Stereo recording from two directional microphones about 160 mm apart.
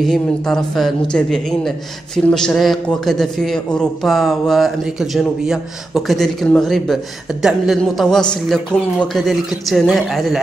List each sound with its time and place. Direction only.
0.0 s a man's voice: centre (ahead or behind)